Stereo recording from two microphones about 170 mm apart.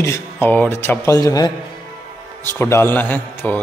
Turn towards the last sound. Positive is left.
turn(degrees=10)  # may be behind; listen again after turning